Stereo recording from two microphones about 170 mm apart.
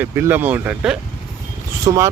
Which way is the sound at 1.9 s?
25° right (ahead or behind).